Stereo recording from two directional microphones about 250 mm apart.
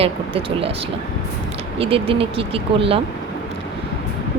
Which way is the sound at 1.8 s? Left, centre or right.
Right.